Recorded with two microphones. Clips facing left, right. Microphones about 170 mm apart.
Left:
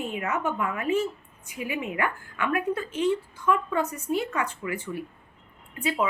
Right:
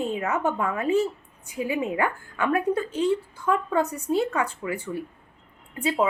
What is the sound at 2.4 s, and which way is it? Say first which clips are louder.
A woman's voice: right 3 dB; 35° right (ahead or behind).